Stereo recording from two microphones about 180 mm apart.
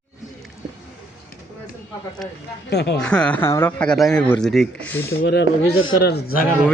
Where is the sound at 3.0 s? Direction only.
5° left (ahead or behind).